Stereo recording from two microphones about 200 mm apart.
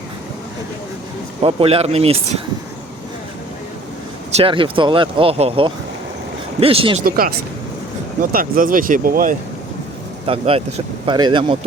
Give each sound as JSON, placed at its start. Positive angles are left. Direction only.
{"t": 1.4, "sound": "speech", "side_deg": -30}
{"t": 4.4, "sound": "speech", "side_deg": -25}
{"t": 7.0, "sound": "speech", "side_deg": -50}
{"t": 10.2, "sound": "speech", "side_deg": -30}